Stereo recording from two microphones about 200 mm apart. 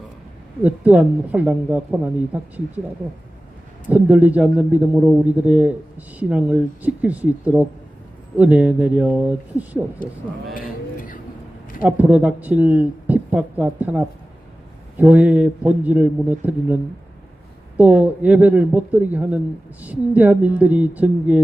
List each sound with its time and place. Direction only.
0.6 s a man's voice: 5° right (ahead or behind)
3.8 s a man's voice: 5° right (ahead or behind)
10.5 s a sound: 45° left (ahead or behind)
11.8 s a man's voice: 10° right (ahead or behind)
17.7 s a man's voice: 5° right (ahead or behind)